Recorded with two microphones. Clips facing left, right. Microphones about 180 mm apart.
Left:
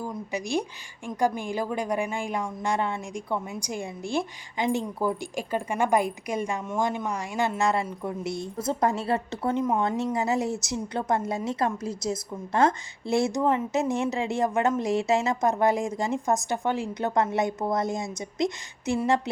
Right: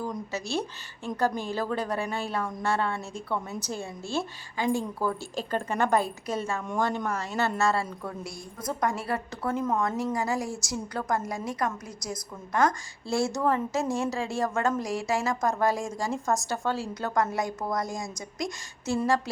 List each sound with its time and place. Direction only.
0.3 s a woman's voice: 15° left (ahead or behind)